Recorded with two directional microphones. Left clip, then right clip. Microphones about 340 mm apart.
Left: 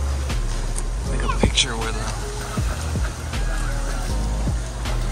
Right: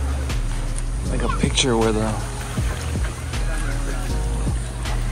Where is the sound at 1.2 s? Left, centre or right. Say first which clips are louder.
Even; centre.